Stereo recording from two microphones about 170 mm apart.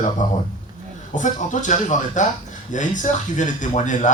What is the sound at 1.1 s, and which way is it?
A man's voice, 45° left (ahead or behind).